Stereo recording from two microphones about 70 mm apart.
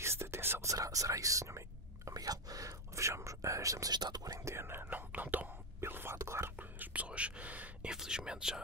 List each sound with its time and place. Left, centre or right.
0.0 s whispering: right
0.7 s whispering: right
2.0 s whispering: right
3.9 s whispering: right
4.5 s whispering: right
5.8 s whispering: right
6.8 s whispering: centre
7.9 s whispering: centre